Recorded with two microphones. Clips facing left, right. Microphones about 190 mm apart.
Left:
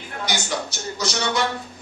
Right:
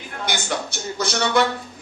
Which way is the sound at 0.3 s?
55° right (ahead or behind).